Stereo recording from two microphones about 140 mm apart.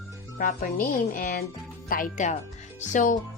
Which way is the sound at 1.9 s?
75° left (ahead or behind).